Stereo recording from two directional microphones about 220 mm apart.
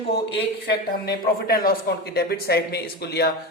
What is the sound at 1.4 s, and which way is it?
Speech, 45° left (ahead or behind).